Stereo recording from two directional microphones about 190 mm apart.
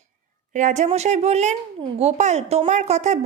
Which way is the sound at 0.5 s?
40° right (ahead or behind).